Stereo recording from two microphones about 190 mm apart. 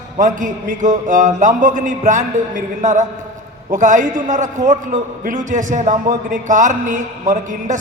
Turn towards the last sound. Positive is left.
turn(degrees=-40)  # may be behind; listen again after turning